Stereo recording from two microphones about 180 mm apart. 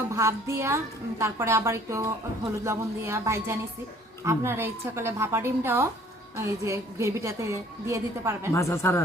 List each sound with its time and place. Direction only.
0.1 s a woman's voice: 15° right (ahead or behind)
8.5 s speech: 15° left (ahead or behind)